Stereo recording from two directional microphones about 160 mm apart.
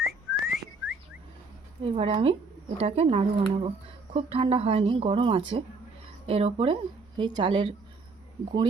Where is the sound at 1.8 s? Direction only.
35° right (ahead or behind).